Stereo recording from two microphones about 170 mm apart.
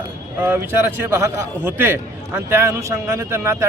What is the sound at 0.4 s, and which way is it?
A man's voice, 15° right (ahead or behind).